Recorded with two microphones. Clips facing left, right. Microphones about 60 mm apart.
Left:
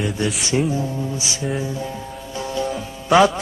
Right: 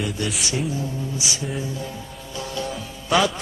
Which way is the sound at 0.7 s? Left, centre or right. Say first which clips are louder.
Left 4 dB; left.